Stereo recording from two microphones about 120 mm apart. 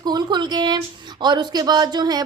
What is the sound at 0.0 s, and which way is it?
A woman's voice, 35° right (ahead or behind).